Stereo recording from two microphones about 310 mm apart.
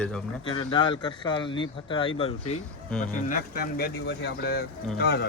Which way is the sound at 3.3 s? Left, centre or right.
Left.